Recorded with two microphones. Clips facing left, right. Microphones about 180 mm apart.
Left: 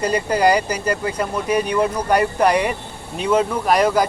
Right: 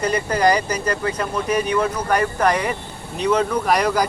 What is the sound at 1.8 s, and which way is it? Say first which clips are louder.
Speech: left 2 dB; 10° left (ahead or behind).